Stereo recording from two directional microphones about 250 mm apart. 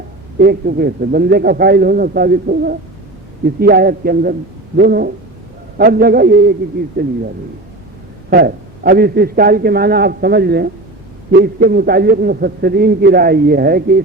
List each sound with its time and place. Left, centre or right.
0.3 s a man's voice: right
8.3 s a man's voice: right